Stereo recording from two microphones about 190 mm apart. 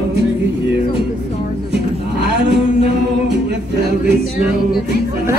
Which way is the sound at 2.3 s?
60° right (ahead or behind).